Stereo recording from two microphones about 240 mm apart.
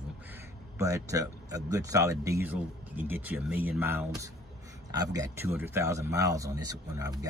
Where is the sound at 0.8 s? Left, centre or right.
Centre.